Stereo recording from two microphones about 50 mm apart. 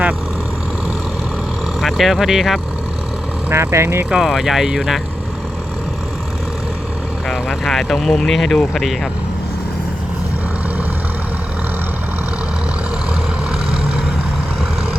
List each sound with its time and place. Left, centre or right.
1.8 s speech: centre
3.5 s speech: right
4.1 s speech: centre
7.3 s speech: centre